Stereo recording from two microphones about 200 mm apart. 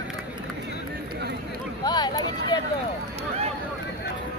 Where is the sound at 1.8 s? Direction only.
20° left (ahead or behind).